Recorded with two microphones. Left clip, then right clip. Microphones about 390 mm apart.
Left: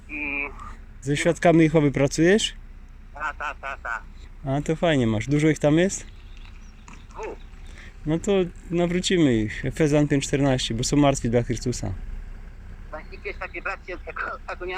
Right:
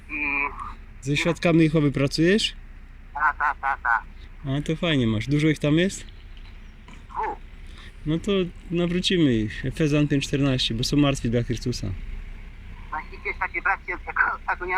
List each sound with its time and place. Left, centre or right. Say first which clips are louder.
0.1 s a sound: right 3 dB; centre
1.0 s speech: left 3 dB; centre
4.4 s speech: left 3 dB; centre
7.1 s dog: right 7 dB; centre
8.0 s speech: left 2 dB; centre
12.9 s speech: right 5 dB; centre